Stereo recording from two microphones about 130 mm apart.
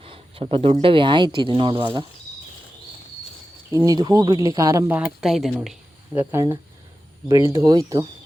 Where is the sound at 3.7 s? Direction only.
25° right (ahead or behind).